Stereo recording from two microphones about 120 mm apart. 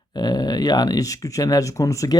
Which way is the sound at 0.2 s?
35° left (ahead or behind).